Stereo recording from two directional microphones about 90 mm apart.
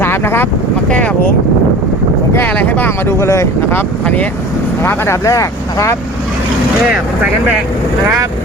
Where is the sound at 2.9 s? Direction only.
30° left (ahead or behind).